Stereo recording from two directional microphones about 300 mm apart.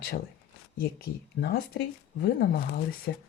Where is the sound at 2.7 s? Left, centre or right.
Left.